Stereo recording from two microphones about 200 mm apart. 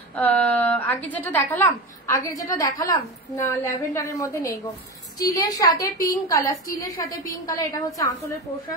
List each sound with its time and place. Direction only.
0.1 s a woman's voice: 5° left (ahead or behind)